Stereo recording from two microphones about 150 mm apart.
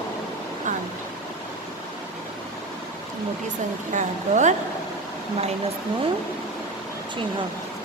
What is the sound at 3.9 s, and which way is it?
Speech, 55° right (ahead or behind).